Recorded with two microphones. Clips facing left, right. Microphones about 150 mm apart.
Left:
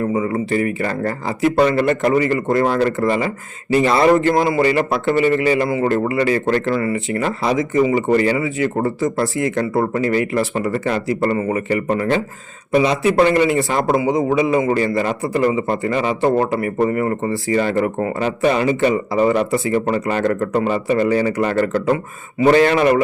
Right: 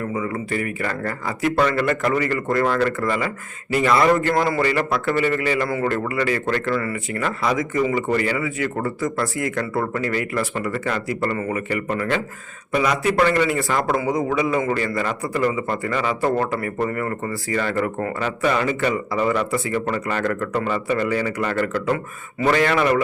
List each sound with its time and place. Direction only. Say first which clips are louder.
0.0 s speech: left 6 dB; 30° left (ahead or behind)